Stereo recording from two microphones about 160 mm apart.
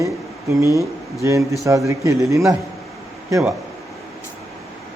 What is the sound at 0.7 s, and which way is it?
Speech, 20° left (ahead or behind).